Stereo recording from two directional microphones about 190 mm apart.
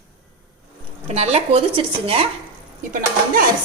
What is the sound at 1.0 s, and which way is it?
A woman's voice, 35° right (ahead or behind).